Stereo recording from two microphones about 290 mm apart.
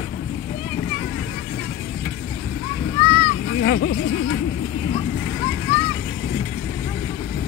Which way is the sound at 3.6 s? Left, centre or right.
Left.